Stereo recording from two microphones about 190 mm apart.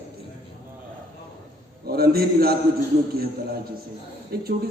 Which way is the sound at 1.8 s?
55° right (ahead or behind).